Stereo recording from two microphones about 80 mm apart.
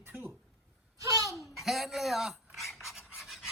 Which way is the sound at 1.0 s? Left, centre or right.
Right.